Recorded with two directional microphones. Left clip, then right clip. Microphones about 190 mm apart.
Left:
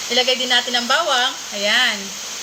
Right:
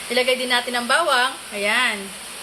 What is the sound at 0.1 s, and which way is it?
Speech, 10° right (ahead or behind).